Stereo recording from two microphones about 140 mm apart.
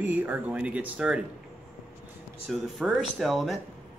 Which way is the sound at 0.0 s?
10° right (ahead or behind).